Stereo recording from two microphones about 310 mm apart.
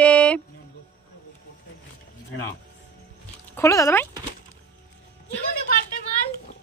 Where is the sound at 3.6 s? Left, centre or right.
Centre.